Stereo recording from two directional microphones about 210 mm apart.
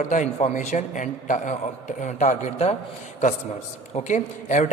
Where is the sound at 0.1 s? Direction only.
35° left (ahead or behind).